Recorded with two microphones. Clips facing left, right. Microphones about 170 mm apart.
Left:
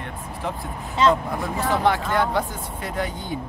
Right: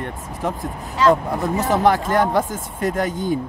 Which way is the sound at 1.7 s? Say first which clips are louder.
Right 4 dB; 45° right (ahead or behind).